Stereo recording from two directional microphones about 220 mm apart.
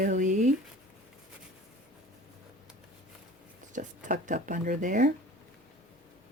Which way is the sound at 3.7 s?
35° right (ahead or behind).